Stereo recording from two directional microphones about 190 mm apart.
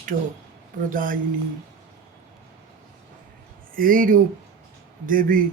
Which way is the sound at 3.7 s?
45° right (ahead or behind).